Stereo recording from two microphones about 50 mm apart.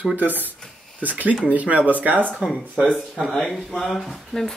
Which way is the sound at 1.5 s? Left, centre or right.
Right.